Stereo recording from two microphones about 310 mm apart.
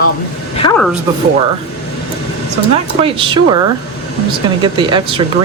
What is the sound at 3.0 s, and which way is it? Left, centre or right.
Speech, centre.